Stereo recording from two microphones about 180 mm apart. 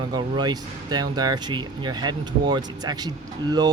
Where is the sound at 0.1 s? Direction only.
25° right (ahead or behind).